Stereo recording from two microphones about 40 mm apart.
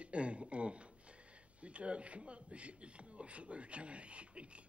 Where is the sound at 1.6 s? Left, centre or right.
Right.